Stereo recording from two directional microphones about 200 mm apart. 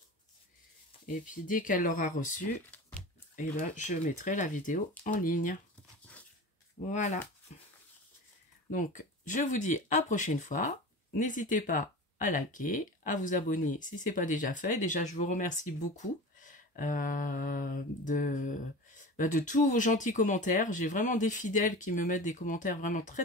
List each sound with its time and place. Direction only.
1.0 s speech: 40° left (ahead or behind)
6.9 s speech: 40° left (ahead or behind)